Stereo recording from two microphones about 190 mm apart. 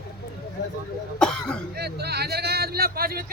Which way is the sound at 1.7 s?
55° right (ahead or behind).